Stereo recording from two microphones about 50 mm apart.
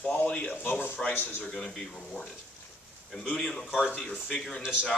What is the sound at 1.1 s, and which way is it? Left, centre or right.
Speech, left.